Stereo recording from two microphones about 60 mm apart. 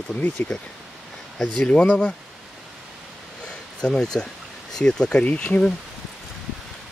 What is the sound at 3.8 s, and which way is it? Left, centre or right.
Speech, centre.